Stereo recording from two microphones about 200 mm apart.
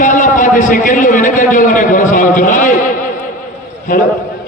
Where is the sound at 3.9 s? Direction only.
40° left (ahead or behind).